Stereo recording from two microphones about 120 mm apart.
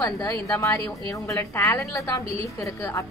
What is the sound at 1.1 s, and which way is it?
A woman's voice, 25° left (ahead or behind).